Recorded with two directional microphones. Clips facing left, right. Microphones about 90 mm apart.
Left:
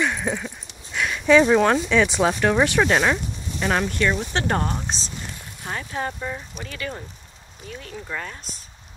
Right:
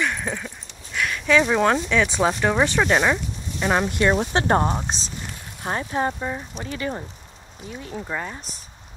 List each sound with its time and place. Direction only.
0.0 s a sound: 10° left (ahead or behind)
0.9 s speech: 10° left (ahead or behind)
2.6 s speech: 10° left (ahead or behind)
2.9 s speech: 5° right (ahead or behind)
3.8 s speech: 25° right (ahead or behind)
4.2 s speech: 35° right (ahead or behind); by 8.4 s 20° right (ahead or behind)